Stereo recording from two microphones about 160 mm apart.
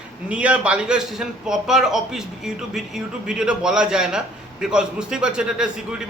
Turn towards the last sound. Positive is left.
turn(degrees=-5)  # may be behind; listen again after turning